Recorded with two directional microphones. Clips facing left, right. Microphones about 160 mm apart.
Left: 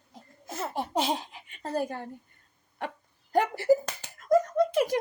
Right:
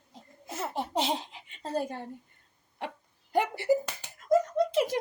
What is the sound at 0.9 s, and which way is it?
Laughter, 20° right (ahead or behind).